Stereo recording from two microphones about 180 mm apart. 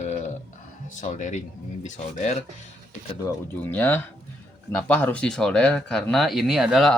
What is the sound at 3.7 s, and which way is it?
Speech, 10° left (ahead or behind).